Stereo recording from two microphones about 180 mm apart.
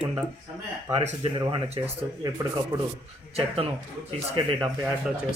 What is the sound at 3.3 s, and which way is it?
Speech, 30° right (ahead or behind).